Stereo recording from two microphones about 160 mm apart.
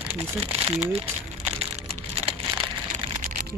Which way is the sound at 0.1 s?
35° right (ahead or behind).